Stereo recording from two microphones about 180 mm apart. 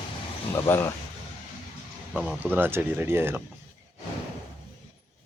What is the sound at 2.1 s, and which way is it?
Speech, 5° right (ahead or behind).